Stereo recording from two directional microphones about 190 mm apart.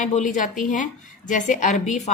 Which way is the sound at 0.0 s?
40° left (ahead or behind).